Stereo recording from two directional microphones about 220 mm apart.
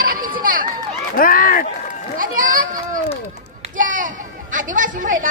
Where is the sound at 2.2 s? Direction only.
40° right (ahead or behind).